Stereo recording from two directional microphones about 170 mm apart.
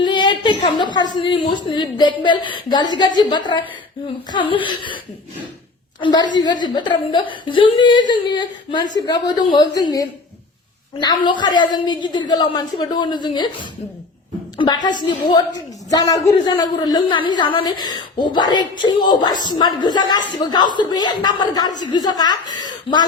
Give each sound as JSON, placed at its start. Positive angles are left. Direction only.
{"t": 0.0, "sound": "a woman's voice", "side_deg": 25}
{"t": 6.0, "sound": "a woman's voice", "side_deg": 25}